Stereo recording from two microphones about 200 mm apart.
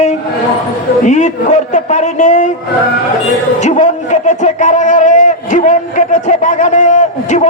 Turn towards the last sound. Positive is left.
turn(degrees=35)  # may be behind; listen again after turning